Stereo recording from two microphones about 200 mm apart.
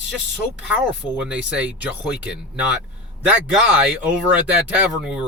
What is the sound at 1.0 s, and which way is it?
Speech, 5° right (ahead or behind).